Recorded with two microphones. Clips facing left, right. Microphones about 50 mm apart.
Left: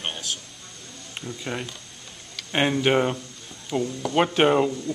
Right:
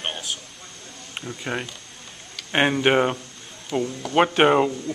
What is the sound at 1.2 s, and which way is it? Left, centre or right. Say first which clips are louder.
Speech: right 2 dB; right.